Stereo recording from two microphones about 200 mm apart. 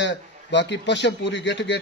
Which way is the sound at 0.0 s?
60° left (ahead or behind).